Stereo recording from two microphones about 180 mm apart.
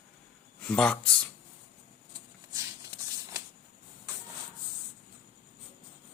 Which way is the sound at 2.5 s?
20° right (ahead or behind).